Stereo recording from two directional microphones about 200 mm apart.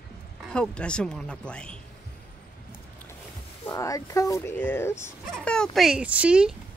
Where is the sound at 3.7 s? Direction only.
15° left (ahead or behind); by 6.5 s 5° right (ahead or behind).